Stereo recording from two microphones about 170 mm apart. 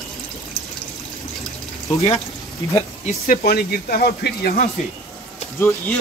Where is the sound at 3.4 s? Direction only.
65° left (ahead or behind).